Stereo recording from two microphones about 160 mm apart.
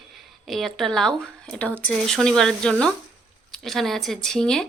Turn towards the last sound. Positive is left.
turn(degrees=5)  # may be behind; listen again after turning